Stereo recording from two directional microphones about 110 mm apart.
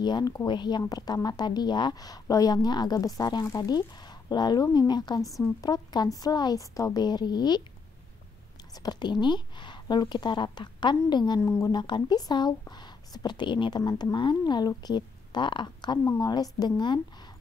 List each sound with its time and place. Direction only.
0.0 s speech: 40° left (ahead or behind)
8.7 s speech: 40° left (ahead or behind)
11.4 s speech: 30° left (ahead or behind)
11.7 s a woman's voice: 45° left (ahead or behind)
16.0 s speech: 25° left (ahead or behind)
16.3 s speech: 35° left (ahead or behind)